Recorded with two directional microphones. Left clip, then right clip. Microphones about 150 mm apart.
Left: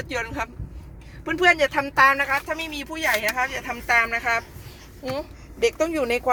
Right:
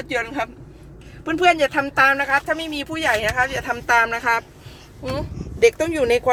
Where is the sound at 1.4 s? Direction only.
20° right (ahead or behind).